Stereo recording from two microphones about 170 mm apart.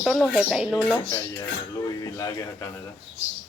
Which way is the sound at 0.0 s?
Centre (ahead or behind).